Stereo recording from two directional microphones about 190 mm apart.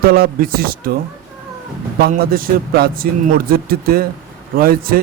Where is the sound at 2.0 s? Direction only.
50° right (ahead or behind).